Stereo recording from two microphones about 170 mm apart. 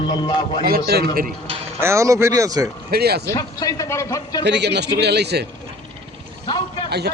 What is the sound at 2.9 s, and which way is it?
Speech, 65° right (ahead or behind).